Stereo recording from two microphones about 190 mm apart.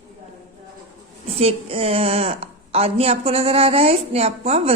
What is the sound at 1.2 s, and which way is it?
A woman's voice, 30° right (ahead or behind).